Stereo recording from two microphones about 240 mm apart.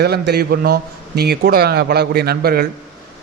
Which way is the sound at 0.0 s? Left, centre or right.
Right.